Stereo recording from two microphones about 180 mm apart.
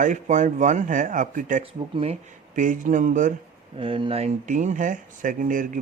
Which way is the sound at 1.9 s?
35° right (ahead or behind).